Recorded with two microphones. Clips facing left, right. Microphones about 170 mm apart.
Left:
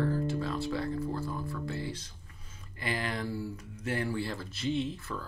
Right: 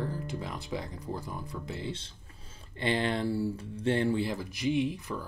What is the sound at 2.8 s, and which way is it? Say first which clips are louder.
Speech: right 5 dB; 25° right (ahead or behind).